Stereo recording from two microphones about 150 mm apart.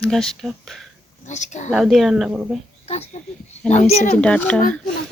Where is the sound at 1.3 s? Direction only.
50° left (ahead or behind).